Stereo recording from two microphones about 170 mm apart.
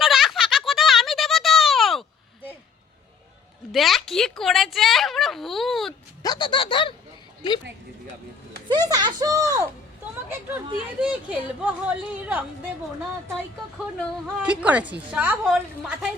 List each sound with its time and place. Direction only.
0.0 s a sound: centre (ahead or behind)
3.7 s speech: centre (ahead or behind)
6.2 s speech: 25° left (ahead or behind)
8.7 s speech: 25° right (ahead or behind)
11.0 s a woman's voice: 5° right (ahead or behind)
13.7 s a woman's voice: 5° right (ahead or behind)